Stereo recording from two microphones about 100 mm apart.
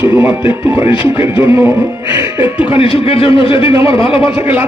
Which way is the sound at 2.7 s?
65° left (ahead or behind).